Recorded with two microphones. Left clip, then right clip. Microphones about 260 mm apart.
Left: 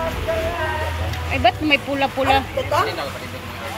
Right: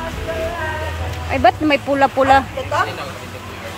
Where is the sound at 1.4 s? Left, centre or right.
Centre.